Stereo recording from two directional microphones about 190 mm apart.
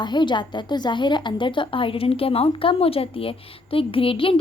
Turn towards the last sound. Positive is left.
turn(degrees=30)  # may be behind; listen again after turning